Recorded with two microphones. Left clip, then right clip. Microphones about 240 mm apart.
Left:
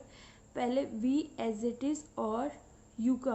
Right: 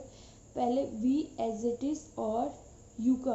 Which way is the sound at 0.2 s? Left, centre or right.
Left.